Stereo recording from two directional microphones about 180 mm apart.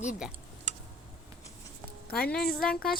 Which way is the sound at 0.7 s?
40° right (ahead or behind).